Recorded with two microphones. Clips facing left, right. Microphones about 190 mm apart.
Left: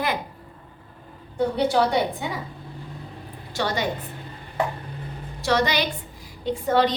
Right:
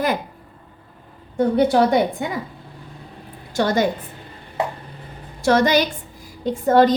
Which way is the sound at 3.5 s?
45° right (ahead or behind).